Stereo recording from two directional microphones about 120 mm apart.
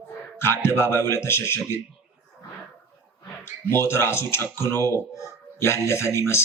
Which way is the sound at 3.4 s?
20° left (ahead or behind).